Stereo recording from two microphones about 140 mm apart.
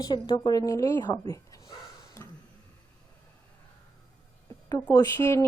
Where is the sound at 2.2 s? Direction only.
20° left (ahead or behind).